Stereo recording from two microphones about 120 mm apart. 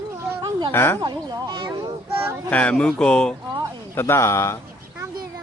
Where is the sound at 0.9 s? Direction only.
30° right (ahead or behind).